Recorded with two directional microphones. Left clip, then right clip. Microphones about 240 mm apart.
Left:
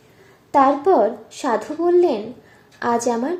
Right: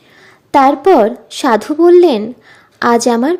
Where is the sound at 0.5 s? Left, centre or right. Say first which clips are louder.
Right 7 dB; right.